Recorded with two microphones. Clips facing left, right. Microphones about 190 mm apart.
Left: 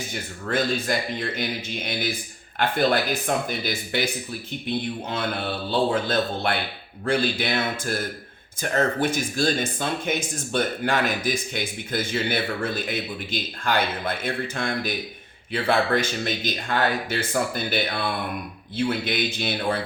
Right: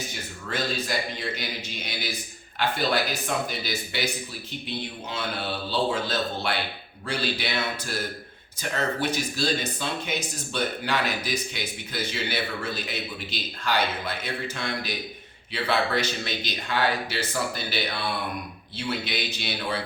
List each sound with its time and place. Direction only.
0.1 s speech: 55° left (ahead or behind)
5.9 s speech: 55° left (ahead or behind)